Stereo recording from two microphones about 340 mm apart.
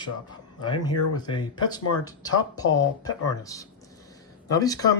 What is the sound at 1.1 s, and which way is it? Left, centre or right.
Speech, centre.